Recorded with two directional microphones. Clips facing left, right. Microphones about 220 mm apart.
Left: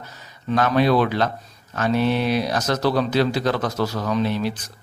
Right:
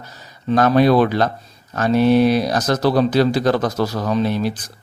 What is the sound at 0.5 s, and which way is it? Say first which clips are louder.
Speech: right 4 dB; 40° right (ahead or behind).